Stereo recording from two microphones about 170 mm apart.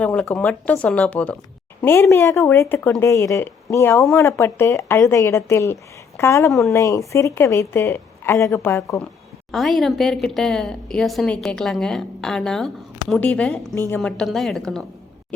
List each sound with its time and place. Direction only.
0.0 s speech: 5° left (ahead or behind)
9.5 s a woman's voice: centre (ahead or behind)